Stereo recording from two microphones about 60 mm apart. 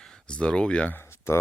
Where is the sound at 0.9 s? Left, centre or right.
Left.